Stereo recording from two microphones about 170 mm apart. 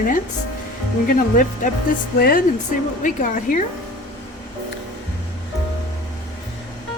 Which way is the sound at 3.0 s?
50° left (ahead or behind).